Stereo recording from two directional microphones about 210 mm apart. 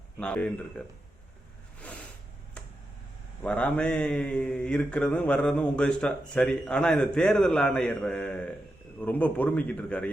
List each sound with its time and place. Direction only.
0.2 s a man's voice: 5° left (ahead or behind)
1.8 s a sound: 5° left (ahead or behind)
3.4 s a man's voice: 5° left (ahead or behind)